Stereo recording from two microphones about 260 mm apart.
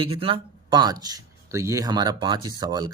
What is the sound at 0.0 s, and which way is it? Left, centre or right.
Speech, right.